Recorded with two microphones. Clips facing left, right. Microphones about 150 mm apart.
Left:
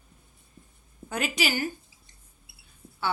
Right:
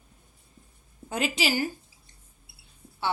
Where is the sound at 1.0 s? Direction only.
25° right (ahead or behind).